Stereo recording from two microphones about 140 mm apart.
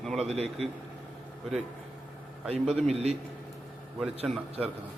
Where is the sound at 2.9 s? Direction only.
50° right (ahead or behind).